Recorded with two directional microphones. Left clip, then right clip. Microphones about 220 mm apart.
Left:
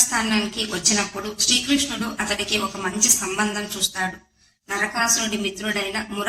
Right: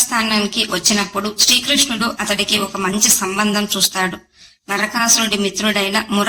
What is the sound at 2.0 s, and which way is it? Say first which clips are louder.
Speech: right 7 dB; 45° right (ahead or behind).